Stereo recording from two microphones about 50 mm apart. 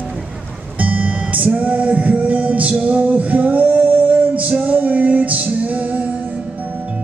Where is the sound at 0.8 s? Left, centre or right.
Right.